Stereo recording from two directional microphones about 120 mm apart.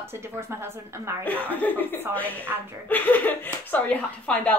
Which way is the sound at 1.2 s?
15° left (ahead or behind).